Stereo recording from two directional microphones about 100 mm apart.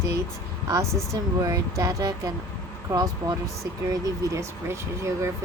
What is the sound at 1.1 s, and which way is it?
Speech, 30° right (ahead or behind).